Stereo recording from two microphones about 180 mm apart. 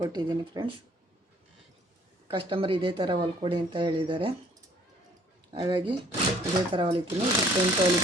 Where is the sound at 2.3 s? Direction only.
30° right (ahead or behind).